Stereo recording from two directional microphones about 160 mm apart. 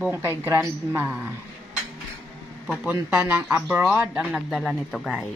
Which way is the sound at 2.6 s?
Centre (ahead or behind).